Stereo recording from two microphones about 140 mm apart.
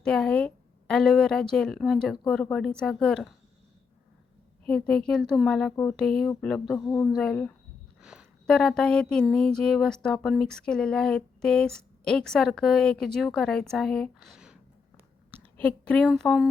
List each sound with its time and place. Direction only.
0.0 s speech: 5° left (ahead or behind)
4.6 s speech: 5° left (ahead or behind)
5.7 s speech: 20° left (ahead or behind)
6.0 s speech: 5° left (ahead or behind)
8.0 s a sound: 5° right (ahead or behind)
8.4 s speech: 5° left (ahead or behind)
15.3 s a sound: 10° left (ahead or behind)
16.0 s speech: centre (ahead or behind)